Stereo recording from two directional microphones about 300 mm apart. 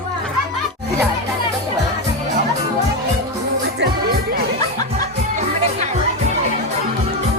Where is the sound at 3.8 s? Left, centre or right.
Right.